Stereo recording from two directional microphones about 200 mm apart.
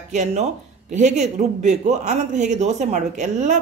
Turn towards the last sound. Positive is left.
turn(degrees=-35)  # may be behind; listen again after turning